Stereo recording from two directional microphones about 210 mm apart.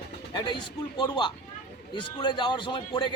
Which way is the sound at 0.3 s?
20° left (ahead or behind).